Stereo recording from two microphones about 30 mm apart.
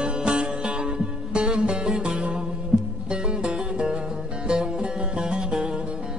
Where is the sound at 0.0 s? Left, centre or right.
Right.